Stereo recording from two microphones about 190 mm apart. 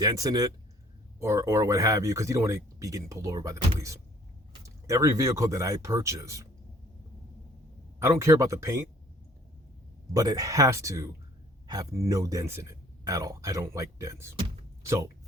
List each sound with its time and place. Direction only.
0.0 s speech: 20° right (ahead or behind)
7.9 s speech: 15° right (ahead or behind)
10.2 s speech: 20° right (ahead or behind)